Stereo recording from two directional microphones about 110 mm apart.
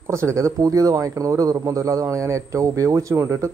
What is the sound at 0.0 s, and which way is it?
A man's voice, 25° right (ahead or behind).